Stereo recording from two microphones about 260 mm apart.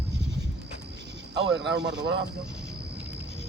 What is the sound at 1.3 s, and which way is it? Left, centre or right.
Speech, right.